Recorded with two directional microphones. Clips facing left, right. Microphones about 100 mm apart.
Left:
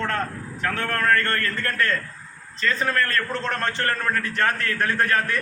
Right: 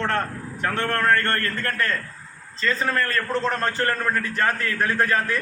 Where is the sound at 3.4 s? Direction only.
5° right (ahead or behind).